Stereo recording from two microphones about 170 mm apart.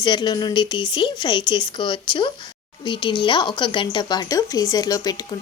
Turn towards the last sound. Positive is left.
turn(degrees=20)  # may be behind; listen again after turning